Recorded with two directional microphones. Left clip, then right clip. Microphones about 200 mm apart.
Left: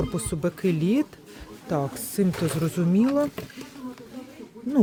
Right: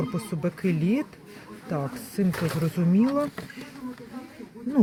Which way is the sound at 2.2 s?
25° left (ahead or behind).